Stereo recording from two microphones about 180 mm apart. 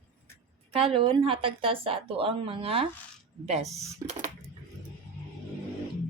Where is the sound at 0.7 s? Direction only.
30° right (ahead or behind).